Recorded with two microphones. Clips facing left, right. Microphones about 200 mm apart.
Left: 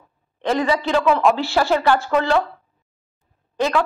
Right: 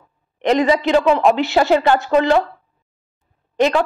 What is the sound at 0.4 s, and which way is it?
Speech, 20° right (ahead or behind).